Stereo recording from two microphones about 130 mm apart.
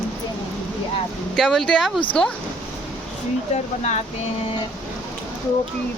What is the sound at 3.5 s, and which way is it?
Speech, 55° left (ahead or behind).